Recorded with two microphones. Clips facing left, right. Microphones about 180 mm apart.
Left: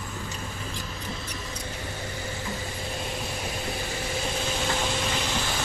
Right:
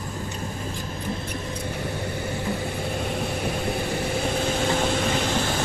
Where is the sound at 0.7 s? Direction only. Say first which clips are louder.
Right 5 dB; 55° right (ahead or behind).